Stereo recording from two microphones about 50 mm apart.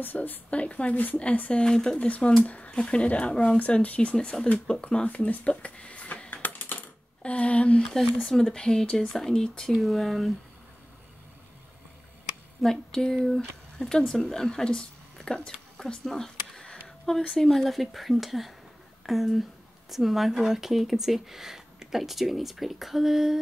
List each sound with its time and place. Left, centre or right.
0.0 s speech: left
0.5 s speech: left
1.5 s speech: centre
2.0 s speech: left
6.3 s typing: left
7.2 s speech: left
7.9 s speech: centre
9.7 s speech: centre
12.6 s speech: centre